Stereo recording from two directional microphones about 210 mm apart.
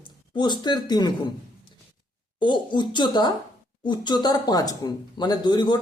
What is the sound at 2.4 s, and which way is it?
Speech, 20° left (ahead or behind).